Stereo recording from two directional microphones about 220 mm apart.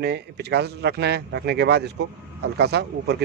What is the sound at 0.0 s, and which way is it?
Speech, 50° right (ahead or behind).